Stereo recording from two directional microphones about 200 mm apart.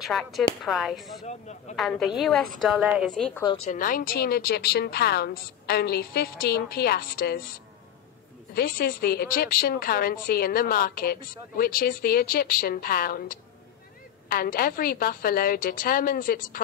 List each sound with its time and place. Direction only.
0.0 s a woman's voice: centre (ahead or behind)
1.2 s speech: 35° left (ahead or behind)
1.8 s a woman's voice: centre (ahead or behind)
3.7 s a woman's voice: 45° left (ahead or behind)